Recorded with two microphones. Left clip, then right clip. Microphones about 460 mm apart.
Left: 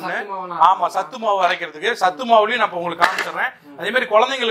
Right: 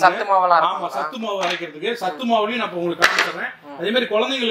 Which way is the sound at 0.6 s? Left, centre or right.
Left.